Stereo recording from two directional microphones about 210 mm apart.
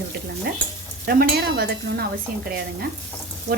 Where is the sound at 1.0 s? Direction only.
45° right (ahead or behind).